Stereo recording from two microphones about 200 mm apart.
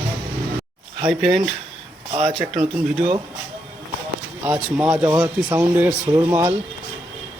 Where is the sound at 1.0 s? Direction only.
Centre (ahead or behind).